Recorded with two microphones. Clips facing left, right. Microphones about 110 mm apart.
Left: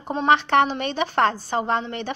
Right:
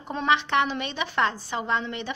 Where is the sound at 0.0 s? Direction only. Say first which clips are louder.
Left 5 dB; 30° left (ahead or behind).